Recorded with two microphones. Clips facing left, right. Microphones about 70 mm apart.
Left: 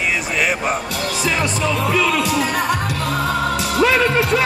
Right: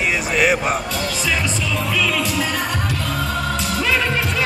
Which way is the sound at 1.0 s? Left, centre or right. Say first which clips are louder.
Left 2 dB; left.